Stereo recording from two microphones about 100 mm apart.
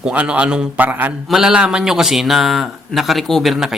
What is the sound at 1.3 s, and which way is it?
A man's voice, 5° right (ahead or behind).